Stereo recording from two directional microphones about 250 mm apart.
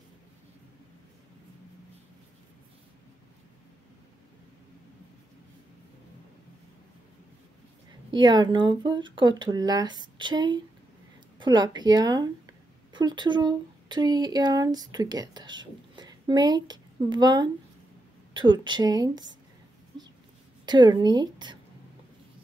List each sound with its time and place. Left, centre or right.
8.1 s speech: centre
20.6 s speech: centre